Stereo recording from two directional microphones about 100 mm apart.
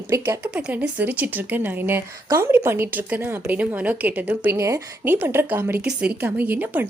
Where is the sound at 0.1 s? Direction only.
35° right (ahead or behind).